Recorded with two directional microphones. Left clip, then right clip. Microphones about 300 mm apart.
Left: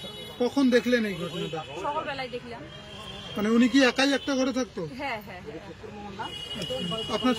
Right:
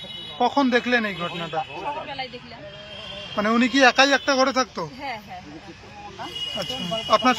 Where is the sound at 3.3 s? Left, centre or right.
Centre.